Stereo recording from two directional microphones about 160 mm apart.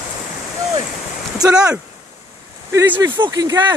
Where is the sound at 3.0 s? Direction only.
25° right (ahead or behind).